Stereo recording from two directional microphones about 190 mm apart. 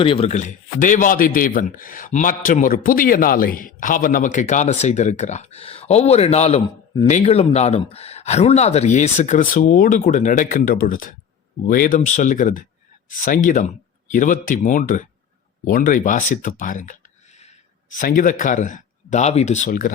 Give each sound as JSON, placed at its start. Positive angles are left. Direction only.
{"t": 0.0, "sound": "speech", "side_deg": 30}